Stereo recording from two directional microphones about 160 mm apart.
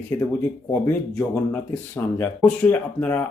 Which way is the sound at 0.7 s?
10° left (ahead or behind).